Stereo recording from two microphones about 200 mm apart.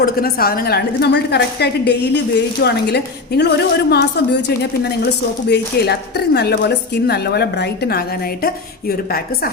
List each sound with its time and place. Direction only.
0.0 s a woman's voice: 50° left (ahead or behind)